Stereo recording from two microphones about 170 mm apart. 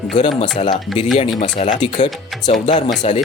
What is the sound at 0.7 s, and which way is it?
Speech, centre (ahead or behind).